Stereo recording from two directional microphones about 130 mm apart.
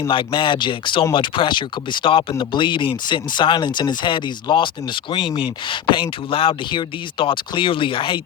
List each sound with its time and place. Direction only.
0.1 s speech: 40° left (ahead or behind)